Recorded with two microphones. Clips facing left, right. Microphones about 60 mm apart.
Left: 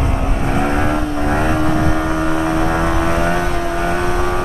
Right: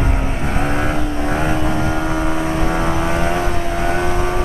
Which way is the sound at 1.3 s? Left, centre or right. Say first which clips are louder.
Left 2 dB; left.